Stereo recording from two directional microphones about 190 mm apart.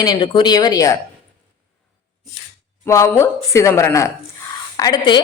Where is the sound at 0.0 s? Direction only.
20° left (ahead or behind).